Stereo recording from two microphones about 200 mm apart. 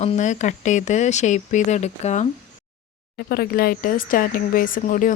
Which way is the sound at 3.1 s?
50° left (ahead or behind).